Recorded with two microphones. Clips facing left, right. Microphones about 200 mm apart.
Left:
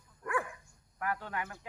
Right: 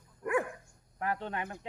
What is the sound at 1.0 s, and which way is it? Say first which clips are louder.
Speech: right 2 dB; 25° right (ahead or behind).